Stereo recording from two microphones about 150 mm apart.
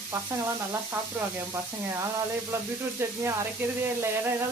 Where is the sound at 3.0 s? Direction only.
20° right (ahead or behind).